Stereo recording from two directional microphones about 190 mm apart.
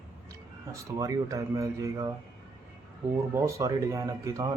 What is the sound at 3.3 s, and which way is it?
A man's voice, 15° right (ahead or behind).